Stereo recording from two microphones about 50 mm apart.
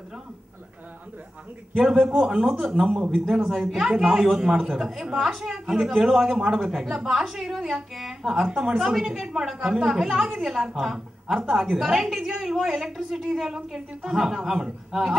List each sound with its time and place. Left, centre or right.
2.0 s a woman's voice: centre
8.7 s a woman's voice: centre
11.3 s a woman's voice: centre